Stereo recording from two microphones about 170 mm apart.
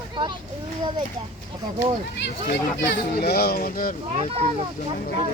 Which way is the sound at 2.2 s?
80° left.